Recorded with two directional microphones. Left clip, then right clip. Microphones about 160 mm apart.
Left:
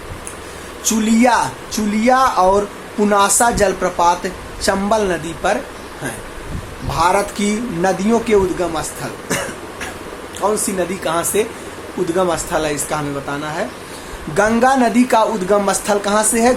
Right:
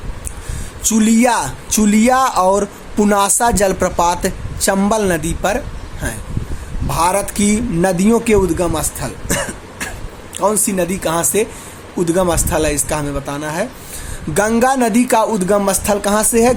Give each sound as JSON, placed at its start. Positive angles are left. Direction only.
{"t": 0.9, "sound": "speech", "side_deg": -55}
{"t": 6.9, "sound": "speech", "side_deg": -45}
{"t": 10.4, "sound": "speech", "side_deg": -50}